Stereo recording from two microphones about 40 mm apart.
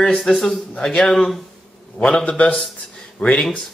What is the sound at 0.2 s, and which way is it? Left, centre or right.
Speech, centre.